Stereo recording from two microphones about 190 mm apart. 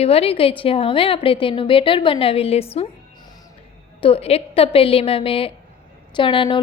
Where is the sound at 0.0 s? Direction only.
30° left (ahead or behind).